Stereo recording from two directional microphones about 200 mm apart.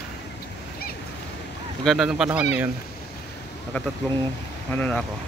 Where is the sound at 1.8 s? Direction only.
Centre (ahead or behind).